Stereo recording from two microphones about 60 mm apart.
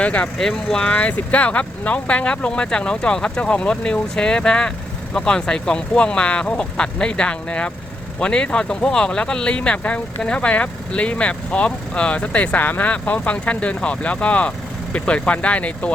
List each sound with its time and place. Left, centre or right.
0.0 s speech: left
0.3 s speech: centre